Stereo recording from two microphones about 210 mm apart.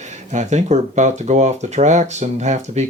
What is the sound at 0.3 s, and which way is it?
Speech, 35° right (ahead or behind).